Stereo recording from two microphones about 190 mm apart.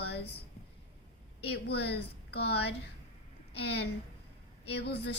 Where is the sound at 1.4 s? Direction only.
60° left (ahead or behind).